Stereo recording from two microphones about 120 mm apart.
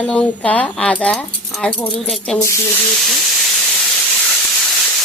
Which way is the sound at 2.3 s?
25° left (ahead or behind).